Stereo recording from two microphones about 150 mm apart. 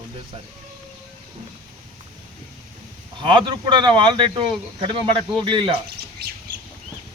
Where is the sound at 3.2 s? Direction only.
30° right (ahead or behind).